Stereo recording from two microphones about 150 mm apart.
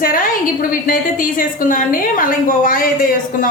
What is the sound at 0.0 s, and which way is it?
A woman's voice, 70° left (ahead or behind).